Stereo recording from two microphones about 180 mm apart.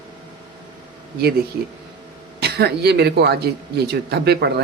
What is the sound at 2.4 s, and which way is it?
Speech, 60° right (ahead or behind).